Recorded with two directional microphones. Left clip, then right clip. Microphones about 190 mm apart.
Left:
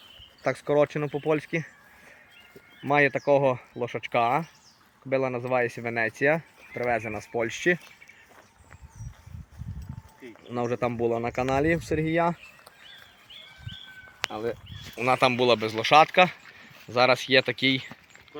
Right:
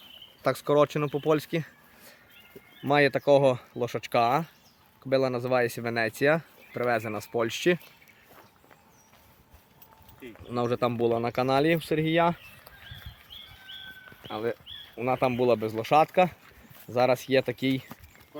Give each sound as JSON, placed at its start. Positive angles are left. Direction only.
{"t": 0.7, "sound": "speech", "side_deg": -15}
{"t": 2.8, "sound": "speech", "side_deg": -20}
{"t": 10.5, "sound": "speech", "side_deg": -15}
{"t": 11.9, "sound": "speech", "side_deg": -5}
{"t": 14.2, "sound": "a sound", "side_deg": -5}
{"t": 14.9, "sound": "speech", "side_deg": 0}